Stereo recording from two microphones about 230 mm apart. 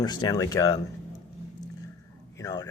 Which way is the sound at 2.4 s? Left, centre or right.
Centre.